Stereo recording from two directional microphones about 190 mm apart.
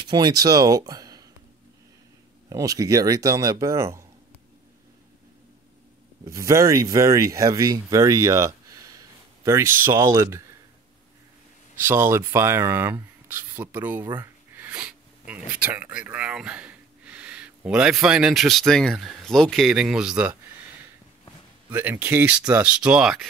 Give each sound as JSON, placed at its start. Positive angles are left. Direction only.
{"t": 0.0, "sound": "speech", "side_deg": -20}
{"t": 2.5, "sound": "speech", "side_deg": -15}
{"t": 6.2, "sound": "speech", "side_deg": -15}
{"t": 11.8, "sound": "speech", "side_deg": -15}
{"t": 21.6, "sound": "speech", "side_deg": -10}